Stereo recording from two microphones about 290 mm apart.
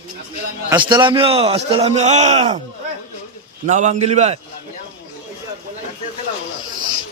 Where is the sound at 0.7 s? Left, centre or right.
Centre.